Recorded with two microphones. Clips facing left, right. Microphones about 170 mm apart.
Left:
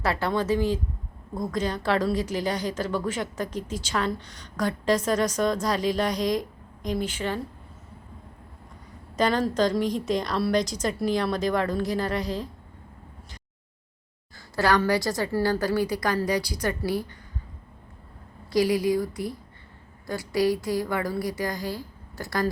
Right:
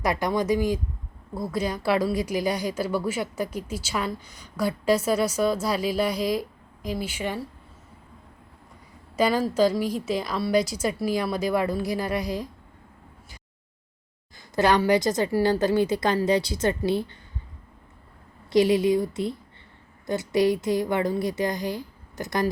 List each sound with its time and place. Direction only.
0.0 s a woman's voice: 15° right (ahead or behind)
9.1 s a woman's voice: 10° right (ahead or behind)
14.3 s a woman's voice: 20° right (ahead or behind)
18.5 s a woman's voice: 25° right (ahead or behind)